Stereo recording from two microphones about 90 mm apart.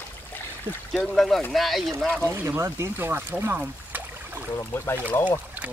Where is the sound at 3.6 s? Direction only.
20° right (ahead or behind).